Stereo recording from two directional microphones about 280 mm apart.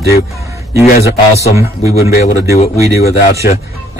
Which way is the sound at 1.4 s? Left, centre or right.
Centre.